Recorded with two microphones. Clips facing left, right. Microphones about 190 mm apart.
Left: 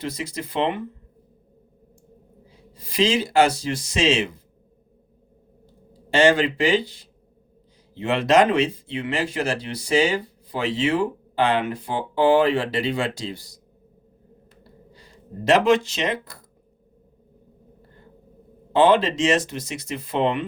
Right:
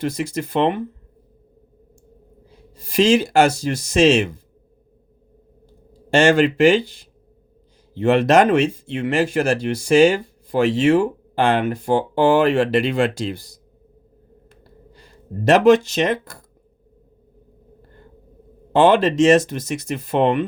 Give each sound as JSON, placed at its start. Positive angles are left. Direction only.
{"t": 0.0, "sound": "speech", "side_deg": -50}
{"t": 2.8, "sound": "speech", "side_deg": -45}
{"t": 6.1, "sound": "speech", "side_deg": -50}
{"t": 7.9, "sound": "speech", "side_deg": -45}
{"t": 14.6, "sound": "a sound", "side_deg": -50}
{"t": 18.7, "sound": "speech", "side_deg": -50}